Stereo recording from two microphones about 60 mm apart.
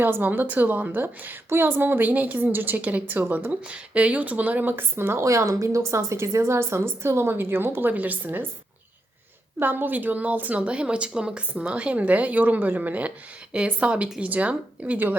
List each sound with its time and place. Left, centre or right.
0.0 s a woman's voice: right
3.5 s a woman's voice: centre; by 5.2 s right
5.2 s speech: right
5.9 s a woman's voice: right
9.6 s a woman's voice: right